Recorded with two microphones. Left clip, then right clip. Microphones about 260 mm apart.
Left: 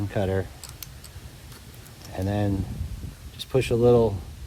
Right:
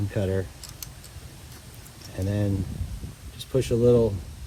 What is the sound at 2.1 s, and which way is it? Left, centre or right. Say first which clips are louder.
Speech: left 2 dB; left.